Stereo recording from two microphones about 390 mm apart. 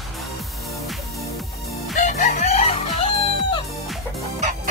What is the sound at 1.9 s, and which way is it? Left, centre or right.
Chicken, centre.